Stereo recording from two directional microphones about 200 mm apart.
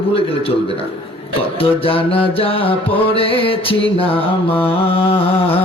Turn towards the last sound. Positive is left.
turn(degrees=30)  # may be behind; listen again after turning